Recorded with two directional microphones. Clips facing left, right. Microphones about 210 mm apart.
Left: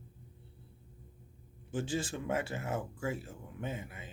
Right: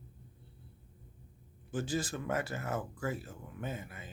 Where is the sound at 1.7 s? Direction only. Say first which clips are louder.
Even; 25° left (ahead or behind).